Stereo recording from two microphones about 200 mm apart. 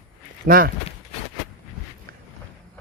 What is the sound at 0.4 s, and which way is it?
Speech, 45° right (ahead or behind).